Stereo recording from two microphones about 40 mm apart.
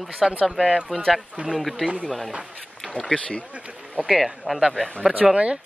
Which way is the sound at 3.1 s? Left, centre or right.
Left.